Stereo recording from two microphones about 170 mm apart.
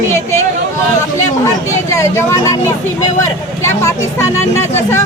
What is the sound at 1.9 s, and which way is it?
Speech, 15° left (ahead or behind).